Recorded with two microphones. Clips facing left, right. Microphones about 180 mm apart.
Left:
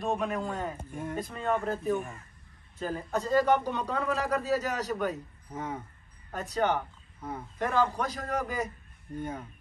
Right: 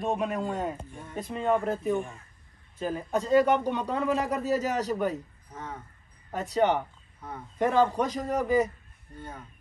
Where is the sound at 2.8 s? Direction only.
15° right (ahead or behind).